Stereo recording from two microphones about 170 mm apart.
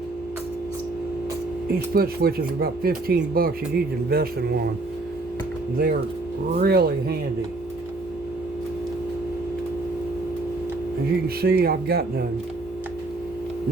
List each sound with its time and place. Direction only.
1.9 s speech: 65° right (ahead or behind)
5.7 s speech: 55° right (ahead or behind)
11.3 s speech: 65° right (ahead or behind)